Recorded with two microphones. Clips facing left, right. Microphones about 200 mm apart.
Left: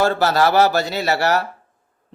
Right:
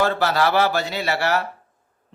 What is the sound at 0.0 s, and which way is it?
Speech, 40° left (ahead or behind).